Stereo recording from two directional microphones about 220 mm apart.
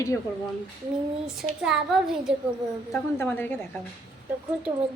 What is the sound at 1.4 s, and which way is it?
Speech, centre (ahead or behind).